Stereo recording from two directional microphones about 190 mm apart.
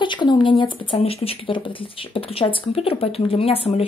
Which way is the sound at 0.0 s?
25° left (ahead or behind).